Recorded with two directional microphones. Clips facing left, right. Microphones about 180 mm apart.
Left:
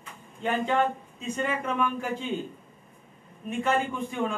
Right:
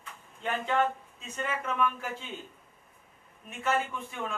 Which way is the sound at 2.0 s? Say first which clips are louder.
Left 8 dB; 30° left (ahead or behind).